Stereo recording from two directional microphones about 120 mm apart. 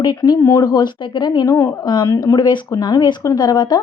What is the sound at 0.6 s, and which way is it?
Speech, 35° left (ahead or behind).